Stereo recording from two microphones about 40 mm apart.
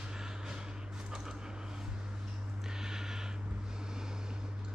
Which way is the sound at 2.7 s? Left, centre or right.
Centre.